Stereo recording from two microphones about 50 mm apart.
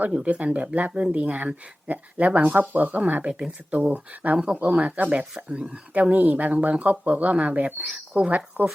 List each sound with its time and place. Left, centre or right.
0.0 s speech: right